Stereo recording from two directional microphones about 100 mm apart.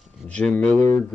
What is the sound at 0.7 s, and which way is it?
Speech, 20° left (ahead or behind).